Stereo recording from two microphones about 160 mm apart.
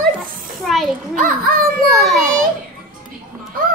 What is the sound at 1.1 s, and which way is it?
Speech, 60° right (ahead or behind).